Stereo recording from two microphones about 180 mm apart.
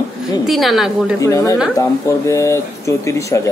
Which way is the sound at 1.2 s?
20° left (ahead or behind).